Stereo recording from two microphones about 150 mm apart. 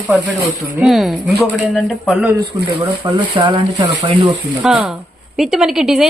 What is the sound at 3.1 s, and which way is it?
Speech, 30° right (ahead or behind).